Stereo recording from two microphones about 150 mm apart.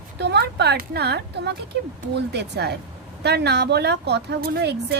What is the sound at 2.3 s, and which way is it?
Speech, 90° right.